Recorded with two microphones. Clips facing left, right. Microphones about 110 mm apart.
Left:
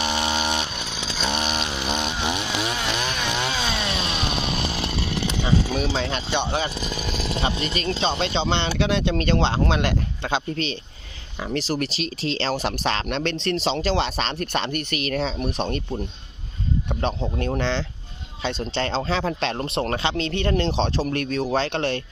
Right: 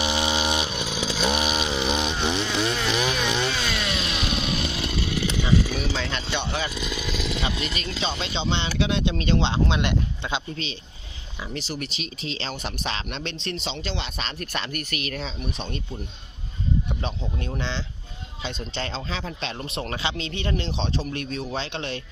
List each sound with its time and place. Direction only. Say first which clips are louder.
0.0 s chainsaw: even; 10° right (ahead or behind)
3.7 s chainsaw: left 2 dB; 35° left (ahead or behind)
6.1 s speech: left 4 dB; 20° left (ahead or behind)
6.5 s speech: left 3 dB; 35° left (ahead or behind)
8.4 s speech: left 3 dB; 65° left (ahead or behind)
9.5 s speech: left 2 dB; 45° left (ahead or behind)
11.8 s speech: left 7 dB; 85° left
12.6 s speech: left 6 dB; 70° left (ahead or behind)
13.9 s speech: left 8 dB; 35° left (ahead or behind)
15.1 s speech: left 7 dB; 65° left (ahead or behind)
17.2 s speech: left 6 dB; 50° left (ahead or behind); by 19.8 s 65° left (ahead or behind)
19.8 s speech: left 5 dB; 45° left (ahead or behind); by 21.2 s 75° left (ahead or behind)
21.5 s speech: left 7 dB; 60° left (ahead or behind)